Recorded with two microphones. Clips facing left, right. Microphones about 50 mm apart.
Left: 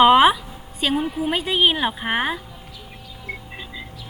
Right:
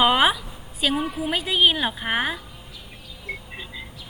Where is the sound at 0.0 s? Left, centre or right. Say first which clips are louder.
Left 6 dB; centre.